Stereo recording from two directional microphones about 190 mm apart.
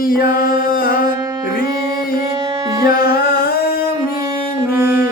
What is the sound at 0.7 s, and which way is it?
Music, 50° left (ahead or behind).